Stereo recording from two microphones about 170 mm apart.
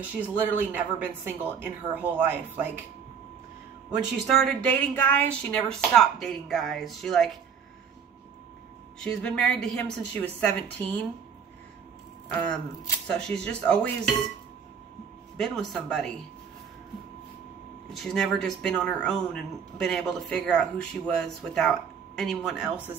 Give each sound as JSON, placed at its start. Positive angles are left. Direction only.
{"t": 0.7, "sound": "a woman's voice", "side_deg": -10}
{"t": 3.9, "sound": "speech", "side_deg": 0}
{"t": 9.0, "sound": "a woman's voice", "side_deg": 5}
{"t": 12.3, "sound": "speech", "side_deg": 5}
{"t": 15.3, "sound": "speech", "side_deg": 5}
{"t": 17.9, "sound": "speech", "side_deg": 5}